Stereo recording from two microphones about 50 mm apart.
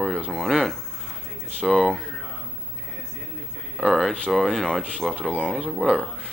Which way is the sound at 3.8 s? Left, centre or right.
Centre.